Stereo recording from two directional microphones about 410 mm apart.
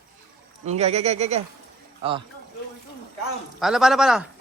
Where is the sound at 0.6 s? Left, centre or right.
Centre.